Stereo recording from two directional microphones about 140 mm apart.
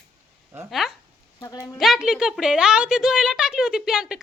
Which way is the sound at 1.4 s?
25° left (ahead or behind).